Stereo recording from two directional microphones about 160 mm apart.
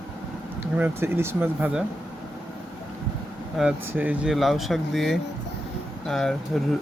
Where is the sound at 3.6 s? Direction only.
10° right (ahead or behind).